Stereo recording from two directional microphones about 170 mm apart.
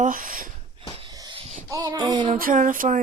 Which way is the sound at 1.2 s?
30° right (ahead or behind).